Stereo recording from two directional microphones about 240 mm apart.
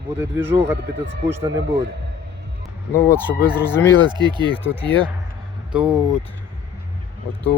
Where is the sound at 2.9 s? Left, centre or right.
Centre.